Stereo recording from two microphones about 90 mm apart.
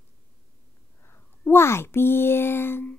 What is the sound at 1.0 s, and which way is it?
A woman's voice, 25° left (ahead or behind).